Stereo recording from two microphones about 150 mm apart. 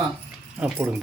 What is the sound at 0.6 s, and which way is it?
Speech, 15° right (ahead or behind).